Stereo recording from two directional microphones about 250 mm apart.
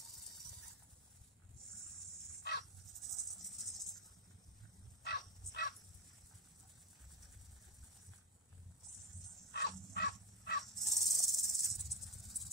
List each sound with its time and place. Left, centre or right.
3.0 s a sound: centre
5.0 s dog: left
9.5 s dog: left
10.9 s insect: centre